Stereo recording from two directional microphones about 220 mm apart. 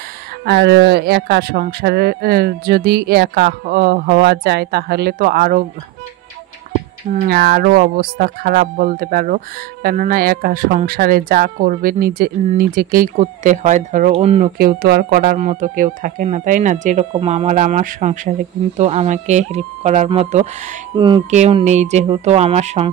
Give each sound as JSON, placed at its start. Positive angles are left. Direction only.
{"t": 0.5, "sound": "speech", "side_deg": -50}
{"t": 7.2, "sound": "speech", "side_deg": -45}
{"t": 14.6, "sound": "speech", "side_deg": -45}